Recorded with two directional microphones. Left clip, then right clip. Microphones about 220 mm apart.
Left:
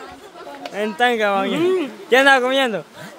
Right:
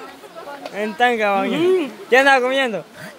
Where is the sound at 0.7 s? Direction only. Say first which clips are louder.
Even; 10° left (ahead or behind).